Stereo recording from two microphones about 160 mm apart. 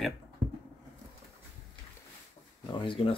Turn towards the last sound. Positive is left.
turn(degrees=35)  # may be behind; listen again after turning